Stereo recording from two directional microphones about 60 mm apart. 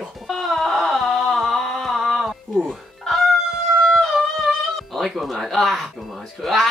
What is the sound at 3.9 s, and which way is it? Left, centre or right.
Music, centre.